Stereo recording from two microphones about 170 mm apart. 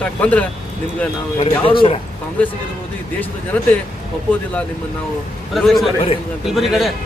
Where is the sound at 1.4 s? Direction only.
30° left (ahead or behind).